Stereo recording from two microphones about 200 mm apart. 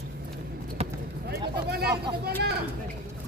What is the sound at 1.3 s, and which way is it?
Speech, 50° right (ahead or behind).